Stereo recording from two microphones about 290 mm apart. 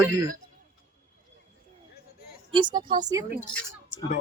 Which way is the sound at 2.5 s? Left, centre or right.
Centre.